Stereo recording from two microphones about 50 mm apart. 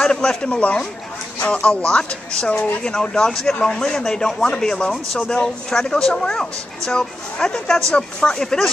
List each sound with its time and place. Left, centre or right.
0.0 s a man's voice: centre